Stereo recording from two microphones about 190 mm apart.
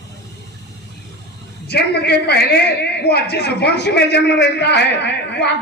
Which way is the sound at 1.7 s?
60° left (ahead or behind).